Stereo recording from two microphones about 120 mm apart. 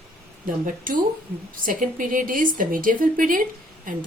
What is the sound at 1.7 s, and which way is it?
A woman's voice, 90° right.